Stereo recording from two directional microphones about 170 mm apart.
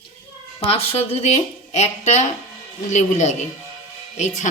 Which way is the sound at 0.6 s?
35° left (ahead or behind).